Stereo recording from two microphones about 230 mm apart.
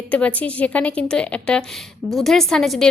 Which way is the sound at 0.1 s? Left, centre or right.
Centre.